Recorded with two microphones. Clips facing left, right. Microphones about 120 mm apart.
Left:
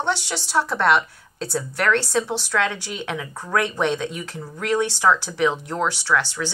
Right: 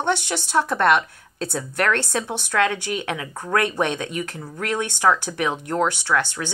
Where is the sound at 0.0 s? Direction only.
55° right (ahead or behind).